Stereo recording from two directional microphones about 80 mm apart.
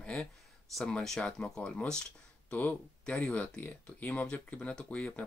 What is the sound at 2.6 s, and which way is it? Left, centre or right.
Speech, centre.